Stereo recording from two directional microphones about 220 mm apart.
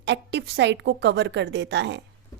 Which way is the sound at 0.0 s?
50° right (ahead or behind).